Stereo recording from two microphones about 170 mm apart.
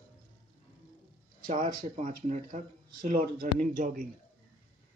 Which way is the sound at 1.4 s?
55° right (ahead or behind).